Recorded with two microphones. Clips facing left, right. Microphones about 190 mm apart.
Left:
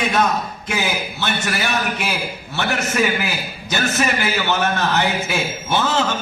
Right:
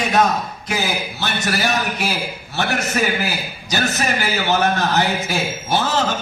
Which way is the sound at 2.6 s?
35° right (ahead or behind).